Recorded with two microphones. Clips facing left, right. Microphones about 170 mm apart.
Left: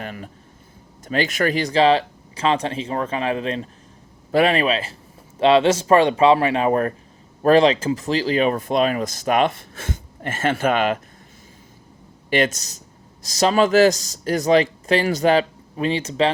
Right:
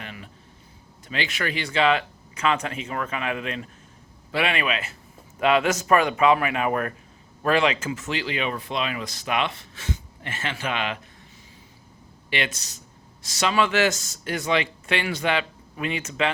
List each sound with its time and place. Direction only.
0.0 s a sound: 45° left (ahead or behind)
1.0 s speech: 45° left (ahead or behind)
12.3 s speech: 45° left (ahead or behind)